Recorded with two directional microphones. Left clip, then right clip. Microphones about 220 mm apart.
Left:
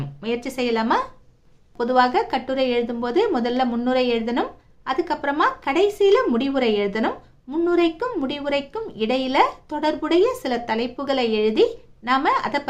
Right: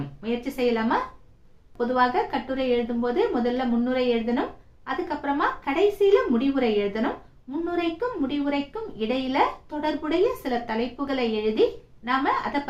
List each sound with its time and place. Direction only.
0.2 s a woman's voice: 50° left (ahead or behind)